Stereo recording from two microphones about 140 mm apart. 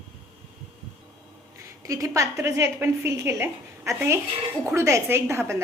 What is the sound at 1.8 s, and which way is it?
A woman's voice, 25° right (ahead or behind).